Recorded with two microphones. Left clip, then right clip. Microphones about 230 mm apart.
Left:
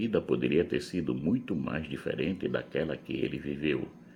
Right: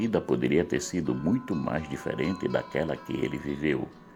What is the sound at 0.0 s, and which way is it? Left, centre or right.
Speech, right.